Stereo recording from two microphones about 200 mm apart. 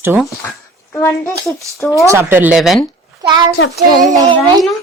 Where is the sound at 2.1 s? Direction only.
10° right (ahead or behind).